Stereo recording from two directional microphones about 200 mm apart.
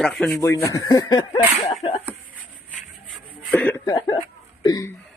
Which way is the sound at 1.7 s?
30° left (ahead or behind).